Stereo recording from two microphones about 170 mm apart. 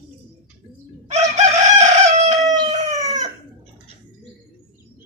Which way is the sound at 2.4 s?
20° right (ahead or behind).